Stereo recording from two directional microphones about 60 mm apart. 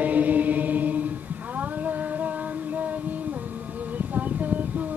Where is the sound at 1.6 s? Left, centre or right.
Right.